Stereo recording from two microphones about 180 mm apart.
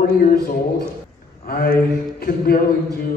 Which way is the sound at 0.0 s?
60° left (ahead or behind).